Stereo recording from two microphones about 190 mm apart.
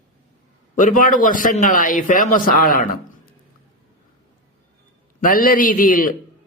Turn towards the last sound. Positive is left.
turn(degrees=45)  # may be behind; listen again after turning